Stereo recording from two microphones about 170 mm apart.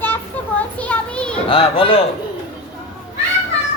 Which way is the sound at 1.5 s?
30° left (ahead or behind).